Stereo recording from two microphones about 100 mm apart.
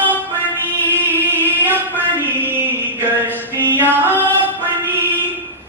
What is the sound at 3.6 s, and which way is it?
Music, 20° right (ahead or behind).